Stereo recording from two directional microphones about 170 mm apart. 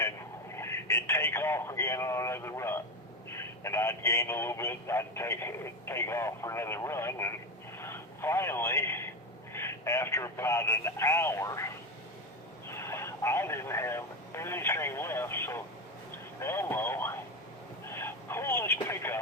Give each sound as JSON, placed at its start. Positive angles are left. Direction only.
{"t": 0.5, "sound": "speech", "side_deg": 15}
{"t": 7.8, "sound": "radio", "side_deg": 15}
{"t": 9.5, "sound": "speech", "side_deg": 15}